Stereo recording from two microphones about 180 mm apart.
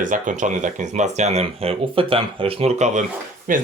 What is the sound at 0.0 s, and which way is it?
Speech, 45° right (ahead or behind).